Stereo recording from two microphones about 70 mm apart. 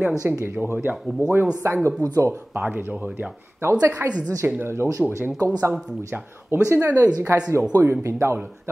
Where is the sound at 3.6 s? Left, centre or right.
Right.